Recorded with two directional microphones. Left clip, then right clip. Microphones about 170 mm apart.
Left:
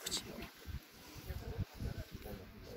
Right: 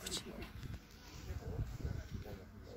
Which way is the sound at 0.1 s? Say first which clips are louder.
Left 2 dB; 60° right (ahead or behind).